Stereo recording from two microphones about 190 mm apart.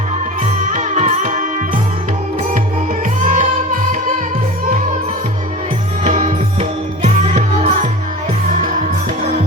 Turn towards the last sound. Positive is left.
turn(degrees=-40)  # may be behind; listen again after turning